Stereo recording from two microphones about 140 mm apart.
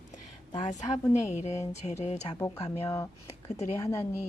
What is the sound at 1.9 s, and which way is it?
Speech, 50° left (ahead or behind).